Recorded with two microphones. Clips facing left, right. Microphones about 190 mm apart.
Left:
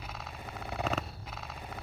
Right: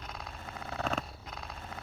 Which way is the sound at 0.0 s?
Centre (ahead or behind).